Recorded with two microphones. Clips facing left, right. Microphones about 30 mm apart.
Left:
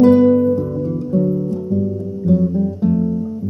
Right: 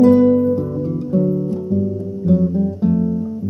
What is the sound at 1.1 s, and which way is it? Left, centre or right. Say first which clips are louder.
Music: even; right.